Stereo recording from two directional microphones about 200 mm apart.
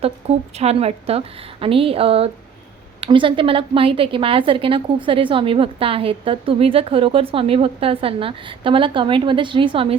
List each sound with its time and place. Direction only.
0.0 s a woman's voice: 30° right (ahead or behind)